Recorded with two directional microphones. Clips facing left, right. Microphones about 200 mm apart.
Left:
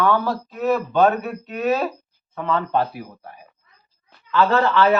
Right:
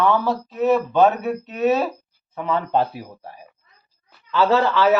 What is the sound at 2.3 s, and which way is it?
Speech, 10° right (ahead or behind).